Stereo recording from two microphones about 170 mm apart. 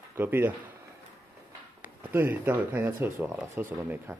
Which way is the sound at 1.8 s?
10° right (ahead or behind).